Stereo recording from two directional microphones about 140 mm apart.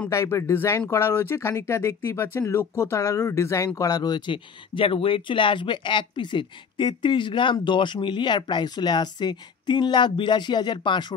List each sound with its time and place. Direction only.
0.1 s speech: 20° left (ahead or behind)